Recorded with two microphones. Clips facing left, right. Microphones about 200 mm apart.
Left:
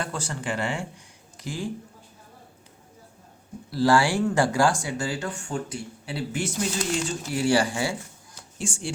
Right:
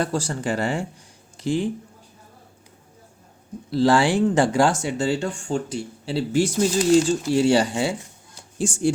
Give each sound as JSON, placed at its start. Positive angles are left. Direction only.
{"t": 0.0, "sound": "speech", "side_deg": -35}
{"t": 1.4, "sound": "speech", "side_deg": -25}
{"t": 3.7, "sound": "speech", "side_deg": -20}
{"t": 8.5, "sound": "speech", "side_deg": -40}